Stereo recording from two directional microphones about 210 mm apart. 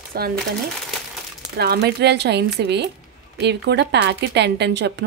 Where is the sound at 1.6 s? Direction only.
50° right (ahead or behind).